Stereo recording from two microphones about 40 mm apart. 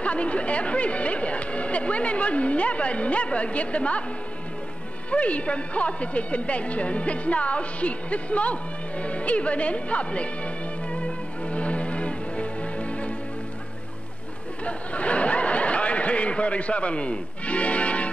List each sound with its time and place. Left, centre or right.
0.0 s speech: left
5.1 s speech: left
14.6 s a sound: left